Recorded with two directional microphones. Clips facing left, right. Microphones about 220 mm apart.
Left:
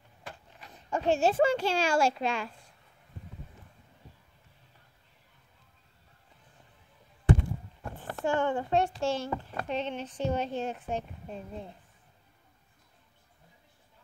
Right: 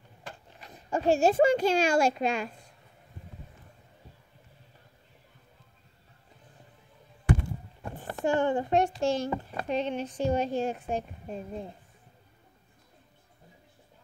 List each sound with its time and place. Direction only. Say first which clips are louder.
0.8 s a child's voice: right 3 dB; 10° right (ahead or behind)
7.3 s a sound: left 2 dB; 25° left (ahead or behind)
8.2 s a child's voice: right 3 dB; 15° right (ahead or behind)